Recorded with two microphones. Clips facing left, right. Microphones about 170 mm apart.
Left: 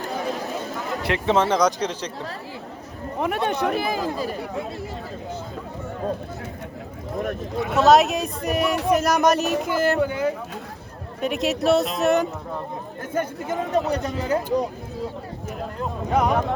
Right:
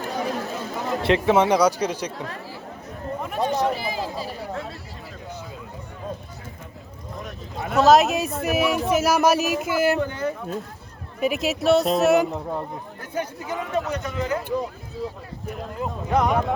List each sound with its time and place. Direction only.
0.8 s a sound: 20° right (ahead or behind)
1.3 s speech: 10° right (ahead or behind)
3.2 s speech: 70° left (ahead or behind)
7.2 s speech: 65° left (ahead or behind)
7.7 s speech: centre (ahead or behind)
10.0 s speech: 15° left (ahead or behind)
11.2 s speech: centre (ahead or behind)
13.1 s speech: 50° left (ahead or behind)
13.7 s speech: 35° left (ahead or behind)
15.4 s speech: centre (ahead or behind)